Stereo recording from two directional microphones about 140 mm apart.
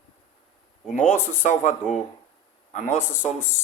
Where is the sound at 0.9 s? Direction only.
60° left (ahead or behind).